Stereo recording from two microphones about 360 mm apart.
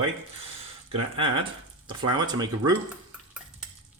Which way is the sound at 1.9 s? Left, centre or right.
Centre.